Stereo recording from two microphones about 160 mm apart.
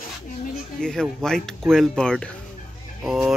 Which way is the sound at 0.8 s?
5° left (ahead or behind).